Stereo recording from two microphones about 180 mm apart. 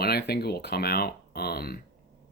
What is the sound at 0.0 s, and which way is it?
Speech, 60° left (ahead or behind).